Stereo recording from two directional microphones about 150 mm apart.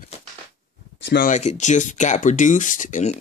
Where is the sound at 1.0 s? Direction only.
60° left (ahead or behind).